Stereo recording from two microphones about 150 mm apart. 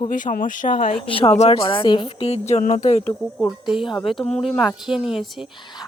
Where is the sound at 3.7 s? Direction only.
Centre (ahead or behind).